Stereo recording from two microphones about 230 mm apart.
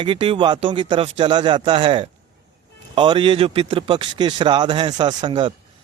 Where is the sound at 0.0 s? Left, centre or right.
Right.